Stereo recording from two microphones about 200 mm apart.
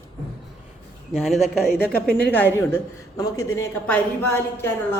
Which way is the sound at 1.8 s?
50° left (ahead or behind).